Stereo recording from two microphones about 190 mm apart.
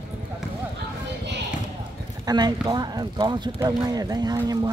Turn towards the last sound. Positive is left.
turn(degrees=-20)  # may be behind; listen again after turning